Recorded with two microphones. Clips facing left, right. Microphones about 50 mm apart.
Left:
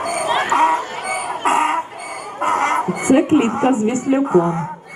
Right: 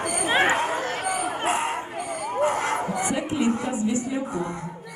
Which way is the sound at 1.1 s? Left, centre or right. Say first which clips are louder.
Left 5 dB; left.